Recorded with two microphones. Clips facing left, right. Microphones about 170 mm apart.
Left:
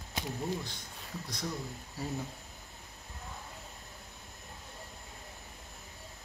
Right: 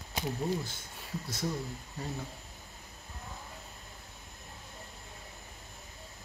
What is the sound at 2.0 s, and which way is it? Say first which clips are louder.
Speech: left 1 dB; 5° left (ahead or behind).